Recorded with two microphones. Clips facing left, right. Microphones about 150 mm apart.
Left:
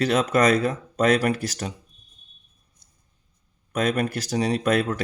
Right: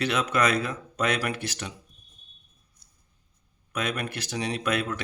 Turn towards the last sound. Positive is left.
turn(degrees=40)  # may be behind; listen again after turning